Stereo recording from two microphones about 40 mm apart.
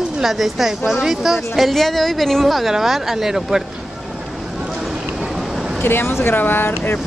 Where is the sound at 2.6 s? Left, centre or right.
Centre.